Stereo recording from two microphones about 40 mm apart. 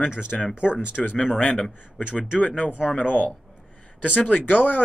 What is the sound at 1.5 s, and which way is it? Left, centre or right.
Speech, centre.